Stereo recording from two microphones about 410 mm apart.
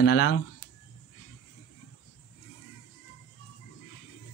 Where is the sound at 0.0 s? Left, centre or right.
Left.